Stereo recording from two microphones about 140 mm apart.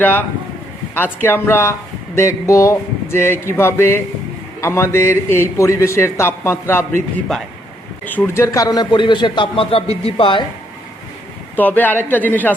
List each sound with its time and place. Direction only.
0.0 s a man's voice: 15° left (ahead or behind)
7.3 s a man's voice: 5° left (ahead or behind); by 10.4 s 40° left (ahead or behind)
11.5 s speech: 10° left (ahead or behind)